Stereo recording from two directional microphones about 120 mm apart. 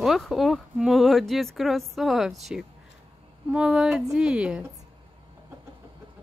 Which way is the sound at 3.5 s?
5° right (ahead or behind).